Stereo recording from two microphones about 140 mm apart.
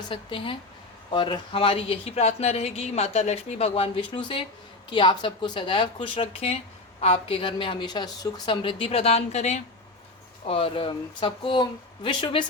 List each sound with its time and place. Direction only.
0.1 s a woman's voice: 40° left (ahead or behind); by 9.6 s 55° left (ahead or behind)
10.4 s a woman's voice: 40° left (ahead or behind)